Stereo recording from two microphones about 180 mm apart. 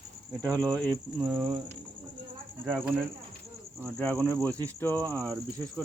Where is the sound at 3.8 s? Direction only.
5° left (ahead or behind).